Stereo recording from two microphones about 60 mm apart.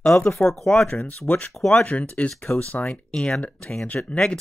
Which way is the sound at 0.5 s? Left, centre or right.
Centre.